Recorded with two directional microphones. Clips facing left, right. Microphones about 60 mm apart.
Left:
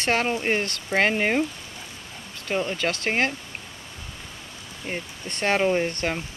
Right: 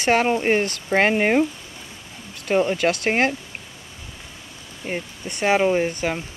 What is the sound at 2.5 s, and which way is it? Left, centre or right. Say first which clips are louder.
Speech: right 6 dB; centre.